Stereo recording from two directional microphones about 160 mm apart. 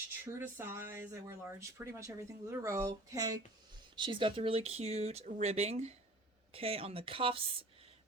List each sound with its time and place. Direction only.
0.3 s speech: 15° right (ahead or behind); by 7.3 s 35° right (ahead or behind)